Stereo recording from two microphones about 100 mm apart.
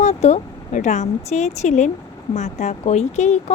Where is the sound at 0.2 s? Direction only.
90° left.